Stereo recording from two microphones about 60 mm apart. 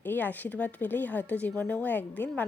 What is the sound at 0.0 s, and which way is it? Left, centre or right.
Speech, left.